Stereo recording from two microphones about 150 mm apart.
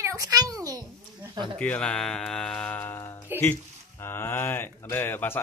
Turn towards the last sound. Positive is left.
turn(degrees=15)  # may be behind; listen again after turning